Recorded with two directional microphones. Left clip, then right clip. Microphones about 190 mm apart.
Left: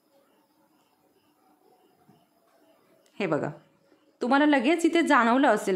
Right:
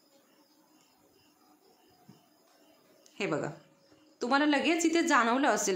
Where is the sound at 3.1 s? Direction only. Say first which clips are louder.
Left 5 dB; 35° left (ahead or behind).